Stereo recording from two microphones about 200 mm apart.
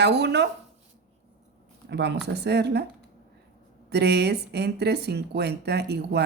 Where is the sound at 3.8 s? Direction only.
55° right (ahead or behind).